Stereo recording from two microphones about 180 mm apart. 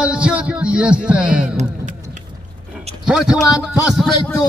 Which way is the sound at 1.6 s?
40° right (ahead or behind).